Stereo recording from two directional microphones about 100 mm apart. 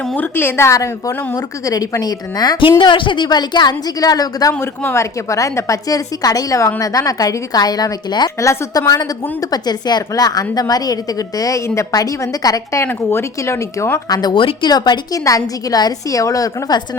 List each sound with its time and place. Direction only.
0.2 s a woman's voice: 20° left (ahead or behind); by 2.6 s 40° left (ahead or behind)
2.6 s a woman's voice: 55° left (ahead or behind); by 4.5 s 40° left (ahead or behind)
4.6 s a woman's voice: 25° left (ahead or behind); by 8.3 s 45° left (ahead or behind)
8.4 s a woman's voice: 30° left (ahead or behind)
12.8 s speech: 25° left (ahead or behind)
14.1 s a woman's voice: 45° left (ahead or behind)
14.3 s a woman's voice: 60° left (ahead or behind)
14.7 s a woman's voice: 45° left (ahead or behind)